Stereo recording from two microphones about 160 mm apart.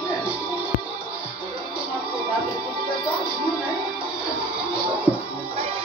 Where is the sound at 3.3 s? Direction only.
10° right (ahead or behind).